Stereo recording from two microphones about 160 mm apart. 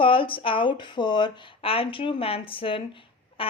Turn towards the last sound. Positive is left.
turn(degrees=30)  # may be behind; listen again after turning